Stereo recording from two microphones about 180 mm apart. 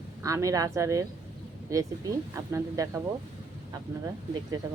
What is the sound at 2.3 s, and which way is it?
Speech, 15° right (ahead or behind).